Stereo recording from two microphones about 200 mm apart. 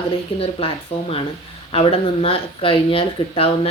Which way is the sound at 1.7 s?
30° left (ahead or behind).